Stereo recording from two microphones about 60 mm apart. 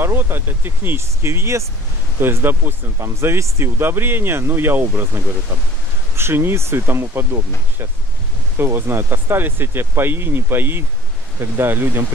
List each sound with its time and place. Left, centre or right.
0.0 s speech: right
2.1 s speech: right